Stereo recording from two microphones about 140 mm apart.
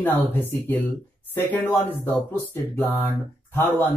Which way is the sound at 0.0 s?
15° left (ahead or behind).